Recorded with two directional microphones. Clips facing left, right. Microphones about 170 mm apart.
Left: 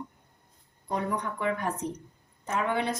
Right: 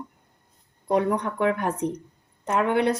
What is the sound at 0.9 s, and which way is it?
A woman's voice, 70° right (ahead or behind).